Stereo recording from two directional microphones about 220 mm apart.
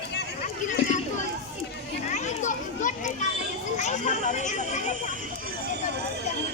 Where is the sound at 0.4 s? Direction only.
35° left (ahead or behind).